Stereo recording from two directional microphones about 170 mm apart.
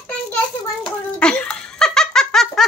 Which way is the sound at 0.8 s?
5° left (ahead or behind).